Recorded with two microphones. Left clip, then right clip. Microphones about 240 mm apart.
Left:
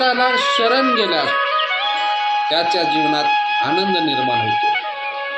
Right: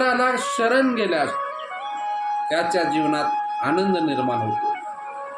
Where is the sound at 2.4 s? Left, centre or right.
Centre.